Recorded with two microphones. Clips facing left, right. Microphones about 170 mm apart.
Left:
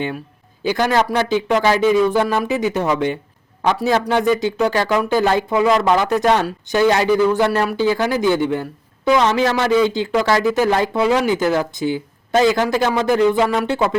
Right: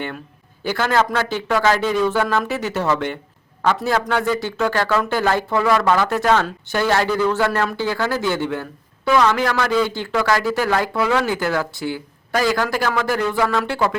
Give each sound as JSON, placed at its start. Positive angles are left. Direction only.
{"t": 0.6, "sound": "speech", "side_deg": 15}